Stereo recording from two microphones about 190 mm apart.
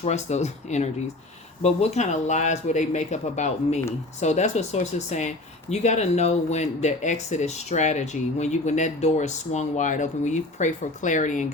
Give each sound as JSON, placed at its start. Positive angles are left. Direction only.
{"t": 0.0, "sound": "speech", "side_deg": 35}